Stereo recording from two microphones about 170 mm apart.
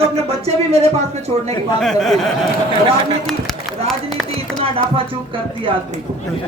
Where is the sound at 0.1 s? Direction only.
35° right (ahead or behind).